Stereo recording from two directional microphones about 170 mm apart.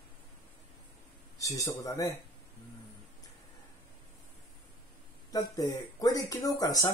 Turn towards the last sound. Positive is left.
turn(degrees=20)  # may be behind; listen again after turning